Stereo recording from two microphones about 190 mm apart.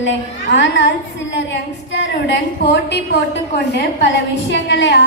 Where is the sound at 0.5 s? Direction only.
70° left (ahead or behind).